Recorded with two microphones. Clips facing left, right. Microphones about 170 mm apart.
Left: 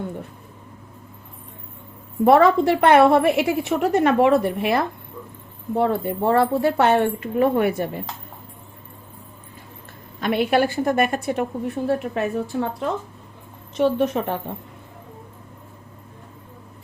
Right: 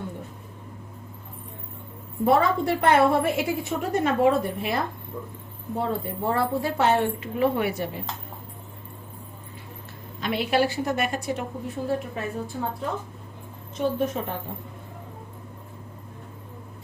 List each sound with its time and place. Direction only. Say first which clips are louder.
2.2 s a woman's voice: left 6 dB; 70° left (ahead or behind); by 7.9 s 50° left (ahead or behind)
10.2 s a woman's voice: left 4 dB; 55° left (ahead or behind); by 12.7 s 75° left (ahead or behind)
13.7 s a woman's voice: left 6 dB; 75° left (ahead or behind)